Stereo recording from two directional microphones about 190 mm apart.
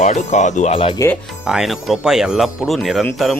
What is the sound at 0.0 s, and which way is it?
Speech, 40° left (ahead or behind).